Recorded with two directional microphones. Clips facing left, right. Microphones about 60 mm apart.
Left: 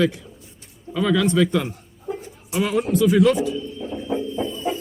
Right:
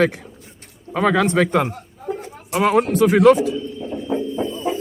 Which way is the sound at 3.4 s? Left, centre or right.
Right.